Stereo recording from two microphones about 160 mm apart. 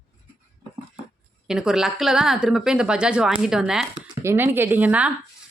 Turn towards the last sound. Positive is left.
turn(degrees=-10)  # may be behind; listen again after turning